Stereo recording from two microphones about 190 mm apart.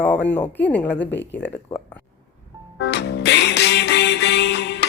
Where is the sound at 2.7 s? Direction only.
65° left (ahead or behind).